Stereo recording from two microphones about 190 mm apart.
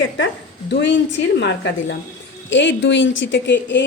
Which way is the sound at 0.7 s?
75° left (ahead or behind).